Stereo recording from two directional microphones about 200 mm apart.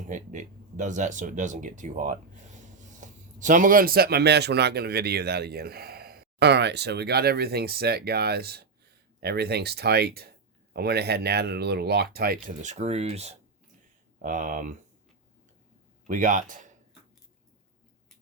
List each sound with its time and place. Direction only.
0.1 s speech: 40° right (ahead or behind)
16.0 s speech: 40° right (ahead or behind)